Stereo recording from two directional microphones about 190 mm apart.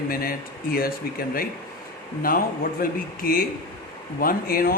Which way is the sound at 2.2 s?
50° left (ahead or behind).